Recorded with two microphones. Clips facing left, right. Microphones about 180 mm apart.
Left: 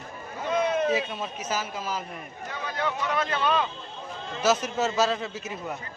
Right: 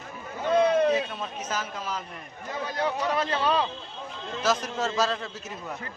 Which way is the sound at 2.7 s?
35° right (ahead or behind).